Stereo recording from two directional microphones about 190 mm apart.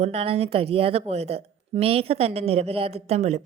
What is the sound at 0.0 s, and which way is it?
A woman's voice, 30° right (ahead or behind).